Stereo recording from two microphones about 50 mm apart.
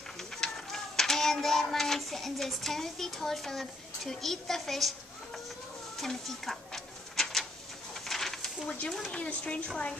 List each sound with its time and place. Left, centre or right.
0.2 s a child's voice: centre
5.9 s a sound: centre
8.6 s speech: centre